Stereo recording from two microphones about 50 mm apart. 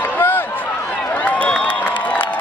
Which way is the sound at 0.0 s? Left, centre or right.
Left.